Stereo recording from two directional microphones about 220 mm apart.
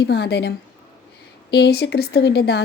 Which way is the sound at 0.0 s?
50° left (ahead or behind).